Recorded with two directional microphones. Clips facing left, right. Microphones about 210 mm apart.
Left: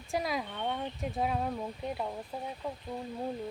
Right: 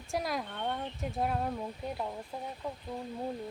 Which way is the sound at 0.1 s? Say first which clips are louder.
Left 1 dB; centre (ahead or behind).